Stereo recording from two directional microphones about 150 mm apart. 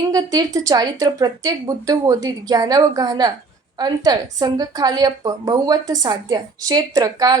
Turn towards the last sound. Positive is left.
turn(degrees=-25)  # may be behind; listen again after turning